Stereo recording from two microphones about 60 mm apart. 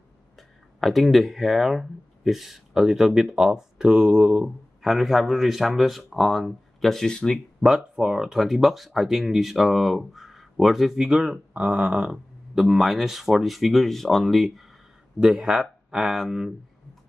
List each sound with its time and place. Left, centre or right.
0.4 s speech: centre
7.6 s speech: centre
11.5 s speech: right
11.9 s speech: centre